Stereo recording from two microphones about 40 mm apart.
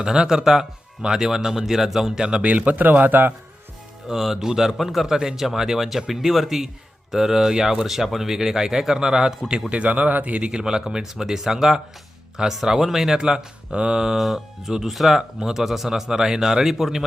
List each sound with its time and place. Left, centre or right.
0.0 s speech: centre
2.4 s a man's voice: right
4.1 s speech: centre
9.7 s speech: right
10.4 s speech: right
13.1 s speech: centre
14.2 s speech: centre